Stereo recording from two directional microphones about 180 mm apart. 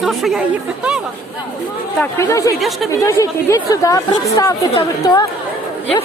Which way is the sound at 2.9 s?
15° left (ahead or behind).